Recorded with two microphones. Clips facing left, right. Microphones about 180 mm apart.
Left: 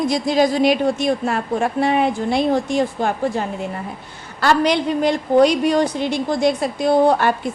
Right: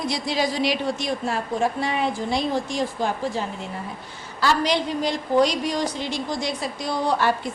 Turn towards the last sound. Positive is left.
turn(degrees=55)  # may be behind; listen again after turning